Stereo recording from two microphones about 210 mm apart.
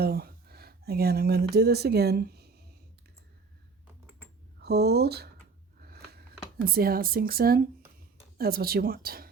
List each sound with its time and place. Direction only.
0.0 s speech: 45° right (ahead or behind)
4.6 s speech: 50° right (ahead or behind)
5.8 s a sound: 50° right (ahead or behind)
6.7 s speech: 45° right (ahead or behind)